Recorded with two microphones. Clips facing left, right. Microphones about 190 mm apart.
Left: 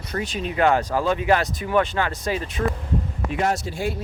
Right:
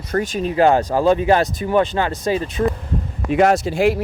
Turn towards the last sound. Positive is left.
turn(degrees=-90)